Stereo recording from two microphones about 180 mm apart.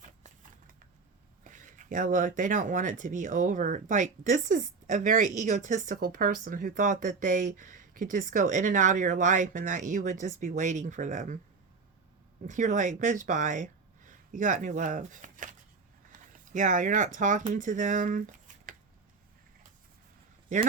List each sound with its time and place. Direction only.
1.5 s speech: 45° right (ahead or behind)
12.5 s speech: 45° right (ahead or behind)